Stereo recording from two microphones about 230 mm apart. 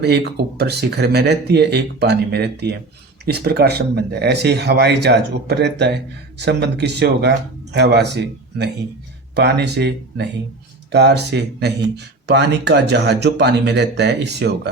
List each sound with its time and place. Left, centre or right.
0.0 s speech: right